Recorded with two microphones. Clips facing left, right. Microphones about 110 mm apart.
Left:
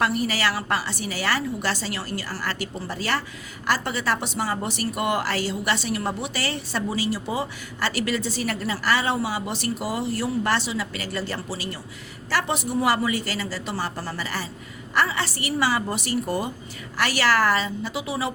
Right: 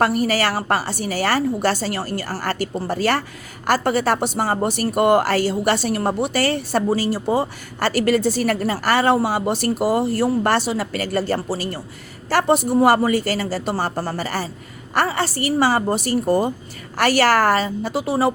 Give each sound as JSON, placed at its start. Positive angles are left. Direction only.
{"t": 0.0, "sound": "a woman's voice", "side_deg": -45}
{"t": 17.0, "sound": "a woman's voice", "side_deg": -50}